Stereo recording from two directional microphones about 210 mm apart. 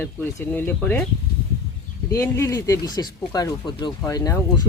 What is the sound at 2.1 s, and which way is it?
Speech, 10° left (ahead or behind).